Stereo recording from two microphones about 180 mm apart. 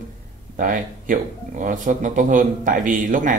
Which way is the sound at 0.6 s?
45° right (ahead or behind).